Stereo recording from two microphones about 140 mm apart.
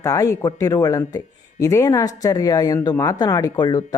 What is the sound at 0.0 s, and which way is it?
Speech, 25° left (ahead or behind).